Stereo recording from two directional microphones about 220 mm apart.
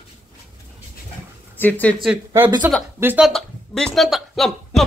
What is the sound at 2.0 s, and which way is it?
A man's voice, 5° right (ahead or behind).